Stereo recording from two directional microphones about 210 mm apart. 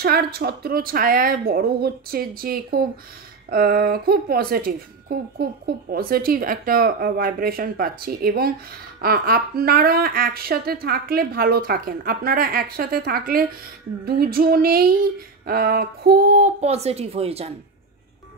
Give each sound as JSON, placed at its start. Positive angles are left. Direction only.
{"t": 0.0, "sound": "a woman's voice", "side_deg": -45}